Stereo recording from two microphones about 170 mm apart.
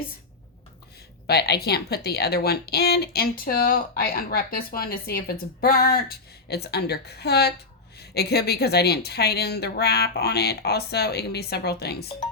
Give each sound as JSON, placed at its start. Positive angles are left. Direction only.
{"t": 1.3, "sound": "speech", "side_deg": 70}